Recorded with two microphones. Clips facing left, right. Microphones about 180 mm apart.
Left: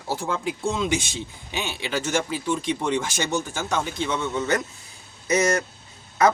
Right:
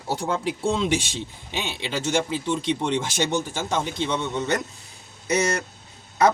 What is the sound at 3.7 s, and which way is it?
Speech, 25° right (ahead or behind).